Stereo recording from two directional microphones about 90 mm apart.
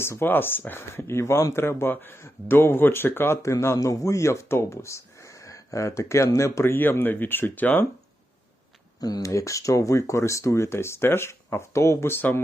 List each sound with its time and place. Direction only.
0.0 s speech: 25° left (ahead or behind)
9.0 s speech: 45° left (ahead or behind); by 12.4 s 25° left (ahead or behind)